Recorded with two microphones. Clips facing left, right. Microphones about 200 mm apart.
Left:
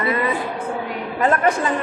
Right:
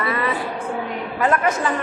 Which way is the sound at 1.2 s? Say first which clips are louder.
Left 2 dB; 30° left (ahead or behind).